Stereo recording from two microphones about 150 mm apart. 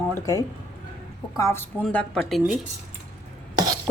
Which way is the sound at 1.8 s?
5° left (ahead or behind).